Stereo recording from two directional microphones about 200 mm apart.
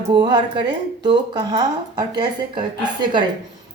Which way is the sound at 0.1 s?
20° right (ahead or behind).